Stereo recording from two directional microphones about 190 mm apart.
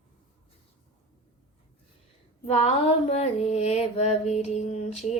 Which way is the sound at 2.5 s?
30° left (ahead or behind).